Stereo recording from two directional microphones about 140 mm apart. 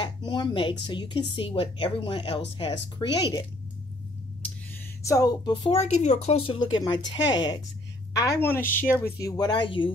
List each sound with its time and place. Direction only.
0.0 s a woman's voice: 30° left (ahead or behind)
5.0 s speech: 25° left (ahead or behind); by 5.9 s 40° left (ahead or behind)
5.9 s a woman's voice: 55° left (ahead or behind); by 7.5 s 30° left (ahead or behind)
8.2 s a woman's voice: 15° left (ahead or behind)
9.0 s a woman's voice: 25° left (ahead or behind)